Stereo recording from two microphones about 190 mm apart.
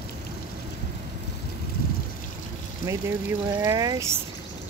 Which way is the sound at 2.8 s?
15° right (ahead or behind).